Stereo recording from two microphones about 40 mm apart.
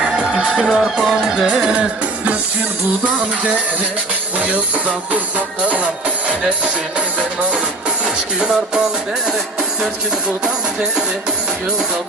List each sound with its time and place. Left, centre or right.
0.0 s music: centre
1.5 s music: right
4.4 s music: right
8.0 s music: right